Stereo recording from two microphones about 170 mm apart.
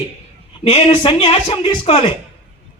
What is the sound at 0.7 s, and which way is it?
Speech, 30° left (ahead or behind).